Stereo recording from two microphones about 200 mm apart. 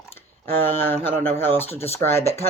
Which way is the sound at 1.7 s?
30° left (ahead or behind).